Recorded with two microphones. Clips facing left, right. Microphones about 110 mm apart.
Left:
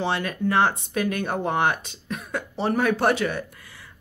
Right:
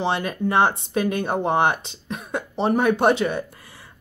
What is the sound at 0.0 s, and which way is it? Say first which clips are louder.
A woman's voice: right 2 dB; 20° right (ahead or behind).